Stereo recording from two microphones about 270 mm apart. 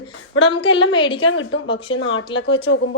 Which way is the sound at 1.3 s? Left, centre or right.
Left.